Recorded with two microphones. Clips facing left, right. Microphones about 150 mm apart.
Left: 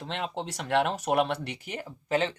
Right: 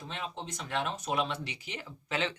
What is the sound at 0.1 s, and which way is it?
Speech, 70° left (ahead or behind).